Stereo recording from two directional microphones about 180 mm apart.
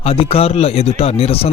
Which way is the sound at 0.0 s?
30° left (ahead or behind).